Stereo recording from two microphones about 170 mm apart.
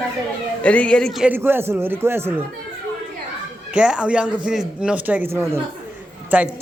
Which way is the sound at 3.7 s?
5° right (ahead or behind).